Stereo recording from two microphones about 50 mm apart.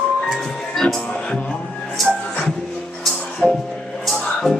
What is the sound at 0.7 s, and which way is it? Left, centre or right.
Music, centre.